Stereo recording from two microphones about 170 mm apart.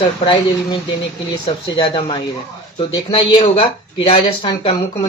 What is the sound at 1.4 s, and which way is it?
Speech, 25° left (ahead or behind).